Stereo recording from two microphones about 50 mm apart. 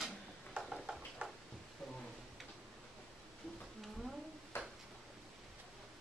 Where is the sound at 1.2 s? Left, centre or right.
Right.